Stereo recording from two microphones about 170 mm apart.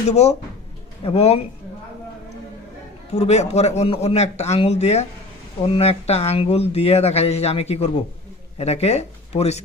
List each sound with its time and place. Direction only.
0.1 s speech: 40° left (ahead or behind)
3.2 s speech: 40° left (ahead or behind)